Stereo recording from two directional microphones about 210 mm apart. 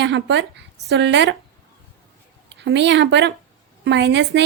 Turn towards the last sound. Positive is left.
turn(degrees=-55)  # may be behind; listen again after turning